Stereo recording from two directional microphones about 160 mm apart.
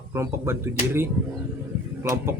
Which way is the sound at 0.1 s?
15° right (ahead or behind).